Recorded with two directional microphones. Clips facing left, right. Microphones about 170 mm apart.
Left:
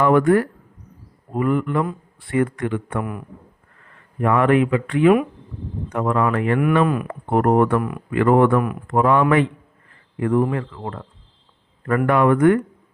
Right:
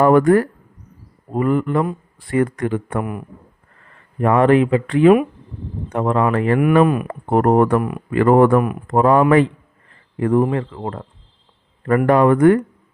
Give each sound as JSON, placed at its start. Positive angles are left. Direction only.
{"t": 0.0, "sound": "speech", "side_deg": -40}
{"t": 3.0, "sound": "a man's voice", "side_deg": -15}
{"t": 4.2, "sound": "speech", "side_deg": -35}
{"t": 6.8, "sound": "a man's voice", "side_deg": -20}
{"t": 7.1, "sound": "speech", "side_deg": -35}
{"t": 12.0, "sound": "speech", "side_deg": -35}